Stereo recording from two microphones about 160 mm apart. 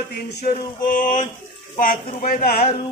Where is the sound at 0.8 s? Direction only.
55° left (ahead or behind).